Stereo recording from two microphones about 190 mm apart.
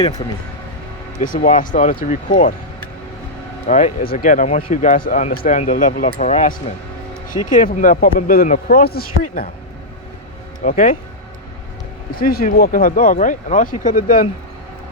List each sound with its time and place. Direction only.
1.2 s speech: 45° left (ahead or behind)
3.7 s speech: 40° left (ahead or behind)
10.6 s speech: 45° left (ahead or behind)
12.1 s speech: 50° left (ahead or behind)